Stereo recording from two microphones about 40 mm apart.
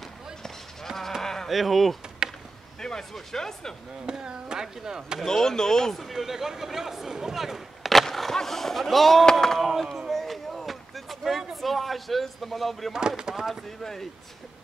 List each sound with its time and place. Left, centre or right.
0.8 s sheep: centre
1.2 s livestock: centre
1.5 s speech: centre
2.8 s speech: centre
4.0 s speech: centre
5.2 s speech: centre
5.9 s speech: centre
9.2 s speech: centre
10.0 s a sound: centre
12.9 s speech: centre